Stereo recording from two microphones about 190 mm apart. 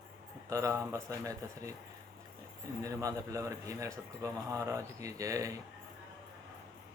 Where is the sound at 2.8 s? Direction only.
15° right (ahead or behind).